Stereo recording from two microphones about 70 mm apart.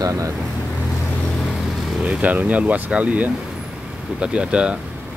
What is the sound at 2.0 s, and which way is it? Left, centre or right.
Speech, right.